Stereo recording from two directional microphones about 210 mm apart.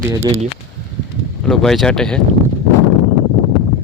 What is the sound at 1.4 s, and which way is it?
Speech, centre (ahead or behind).